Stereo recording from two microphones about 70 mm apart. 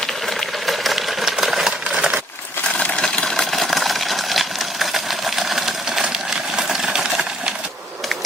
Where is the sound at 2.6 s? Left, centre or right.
Centre.